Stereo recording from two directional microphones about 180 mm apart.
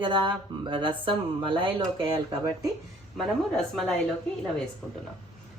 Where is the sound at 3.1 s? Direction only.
Centre (ahead or behind).